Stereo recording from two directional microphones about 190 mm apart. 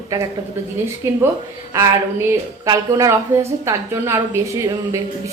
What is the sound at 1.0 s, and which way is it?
A woman's voice, 15° right (ahead or behind).